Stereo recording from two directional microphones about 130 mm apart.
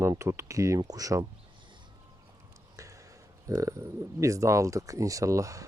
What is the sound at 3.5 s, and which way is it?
Speech, 25° right (ahead or behind).